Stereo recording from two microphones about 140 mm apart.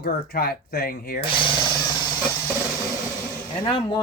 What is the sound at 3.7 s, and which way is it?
Speech, 35° left (ahead or behind).